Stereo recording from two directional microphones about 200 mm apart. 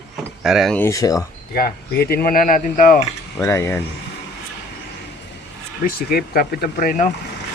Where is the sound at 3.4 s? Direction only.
15° left (ahead or behind).